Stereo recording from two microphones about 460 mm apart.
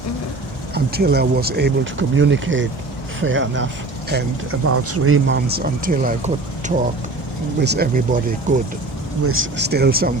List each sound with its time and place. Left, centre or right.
0.7 s speech: right